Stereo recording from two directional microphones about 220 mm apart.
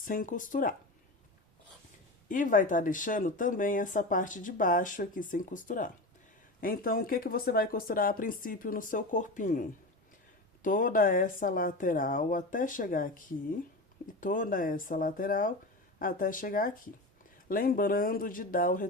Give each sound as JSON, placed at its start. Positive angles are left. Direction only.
{"t": 0.0, "sound": "speech", "side_deg": 40}
{"t": 2.3, "sound": "speech", "side_deg": 35}